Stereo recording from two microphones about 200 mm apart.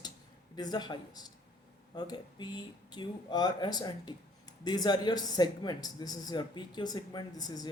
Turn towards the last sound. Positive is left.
turn(degrees=20)  # may be behind; listen again after turning